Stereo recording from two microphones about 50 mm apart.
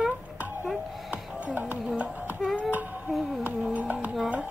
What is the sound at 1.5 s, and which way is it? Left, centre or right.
Music, right.